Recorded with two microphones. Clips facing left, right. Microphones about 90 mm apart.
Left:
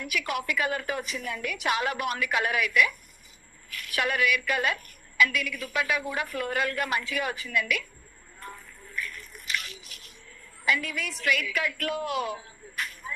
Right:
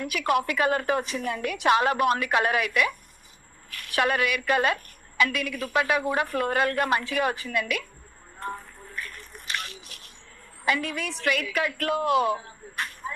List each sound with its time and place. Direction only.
0.0 s a woman's voice: 35° right (ahead or behind)
8.4 s a sound: 40° right (ahead or behind)
10.7 s a woman's voice: 30° right (ahead or behind)